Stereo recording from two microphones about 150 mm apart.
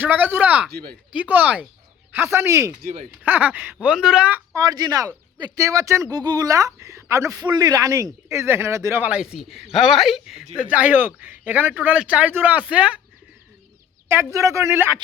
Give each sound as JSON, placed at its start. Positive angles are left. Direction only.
{"t": 0.0, "sound": "speech", "side_deg": -10}
{"t": 0.7, "sound": "speech", "side_deg": -90}
{"t": 1.1, "sound": "speech", "side_deg": -10}
{"t": 14.1, "sound": "speech", "side_deg": -20}